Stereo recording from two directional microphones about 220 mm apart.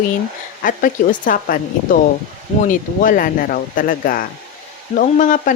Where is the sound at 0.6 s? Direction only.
40° left (ahead or behind).